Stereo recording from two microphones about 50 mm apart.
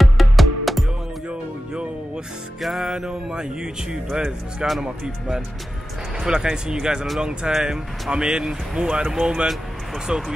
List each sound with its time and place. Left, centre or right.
0.0 s music: centre
2.6 s music: centre
3.1 s speech: centre
7.5 s music: centre
8.1 s speech: centre